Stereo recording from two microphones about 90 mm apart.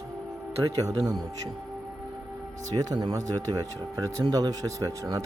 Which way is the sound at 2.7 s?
45° right (ahead or behind).